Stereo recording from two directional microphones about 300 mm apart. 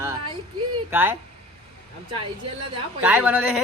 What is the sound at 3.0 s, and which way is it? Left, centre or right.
Speech, centre.